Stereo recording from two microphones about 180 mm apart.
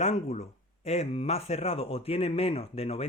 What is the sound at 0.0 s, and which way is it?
Speech, 35° left (ahead or behind).